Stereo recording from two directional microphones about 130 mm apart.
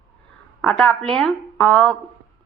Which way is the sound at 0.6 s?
5° left (ahead or behind).